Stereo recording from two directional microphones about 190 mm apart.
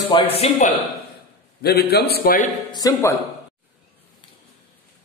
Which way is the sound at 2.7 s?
20° left (ahead or behind).